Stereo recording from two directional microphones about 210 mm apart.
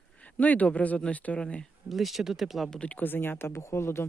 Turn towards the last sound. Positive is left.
turn(degrees=10)  # may be behind; listen again after turning